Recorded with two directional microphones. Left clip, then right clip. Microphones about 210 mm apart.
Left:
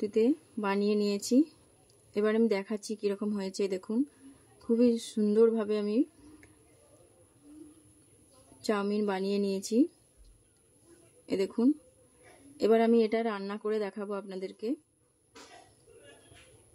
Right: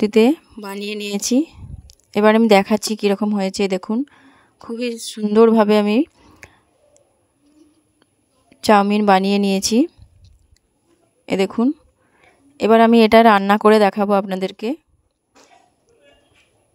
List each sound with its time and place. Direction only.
0.0 s speech: 50° right (ahead or behind)
0.6 s speech: centre (ahead or behind)
0.8 s speech: 50° right (ahead or behind)
8.5 s speech: 45° right (ahead or behind)
11.2 s speech: 45° right (ahead or behind)